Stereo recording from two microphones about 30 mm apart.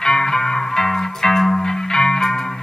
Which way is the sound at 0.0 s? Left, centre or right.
Centre.